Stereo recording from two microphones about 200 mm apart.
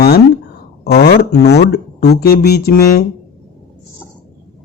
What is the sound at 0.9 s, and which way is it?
Speech, 50° left (ahead or behind).